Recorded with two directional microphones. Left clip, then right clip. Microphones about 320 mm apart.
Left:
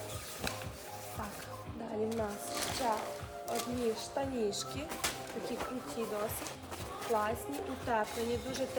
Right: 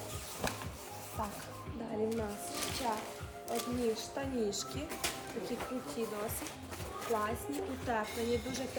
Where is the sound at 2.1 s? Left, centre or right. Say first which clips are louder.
Left 2 dB; centre.